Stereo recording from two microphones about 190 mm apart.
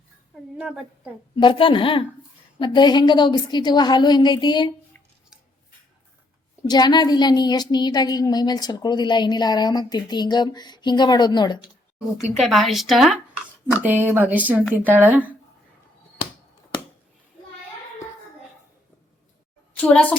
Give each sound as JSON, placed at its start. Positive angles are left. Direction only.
{"t": 0.5, "sound": "speech", "side_deg": -5}
{"t": 1.4, "sound": "a woman's voice", "side_deg": 25}
{"t": 6.7, "sound": "a woman's voice", "side_deg": 20}
{"t": 12.4, "sound": "speech", "side_deg": 0}
{"t": 19.7, "sound": "a child's voice", "side_deg": 10}